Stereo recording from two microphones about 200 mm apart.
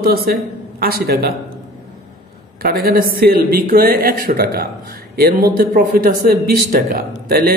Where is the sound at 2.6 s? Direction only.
50° right (ahead or behind).